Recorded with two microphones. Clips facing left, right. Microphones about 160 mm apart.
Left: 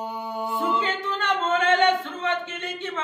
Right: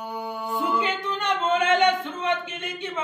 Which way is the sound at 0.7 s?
15° right (ahead or behind).